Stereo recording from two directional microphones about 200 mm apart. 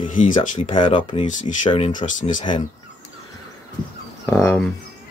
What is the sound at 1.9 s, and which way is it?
Speech, 40° left (ahead or behind).